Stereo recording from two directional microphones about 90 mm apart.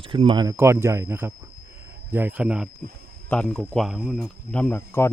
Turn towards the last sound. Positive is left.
turn(degrees=30)  # may be behind; listen again after turning